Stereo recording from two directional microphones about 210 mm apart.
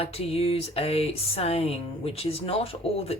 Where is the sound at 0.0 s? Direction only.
30° left (ahead or behind).